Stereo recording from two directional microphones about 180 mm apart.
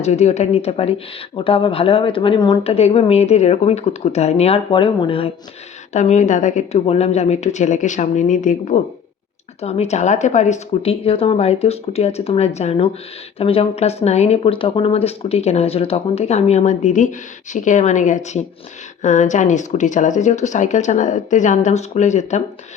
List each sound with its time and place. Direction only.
0.0 s speech: 35° left (ahead or behind)